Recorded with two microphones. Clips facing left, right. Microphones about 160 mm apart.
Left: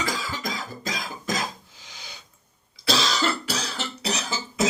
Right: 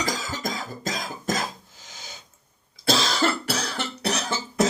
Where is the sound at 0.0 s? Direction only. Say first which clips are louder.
Right 1 dB; 45° right (ahead or behind).